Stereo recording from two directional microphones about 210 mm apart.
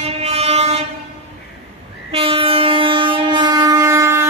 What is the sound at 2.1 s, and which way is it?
Train, 25° right (ahead or behind).